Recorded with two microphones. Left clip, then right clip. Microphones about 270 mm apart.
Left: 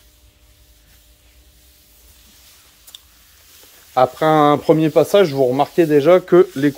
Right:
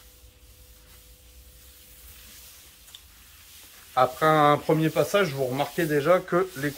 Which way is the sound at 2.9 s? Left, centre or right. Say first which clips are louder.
Left 8 dB; left.